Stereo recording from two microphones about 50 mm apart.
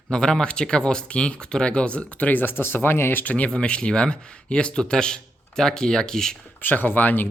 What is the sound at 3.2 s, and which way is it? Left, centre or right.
Speech, left.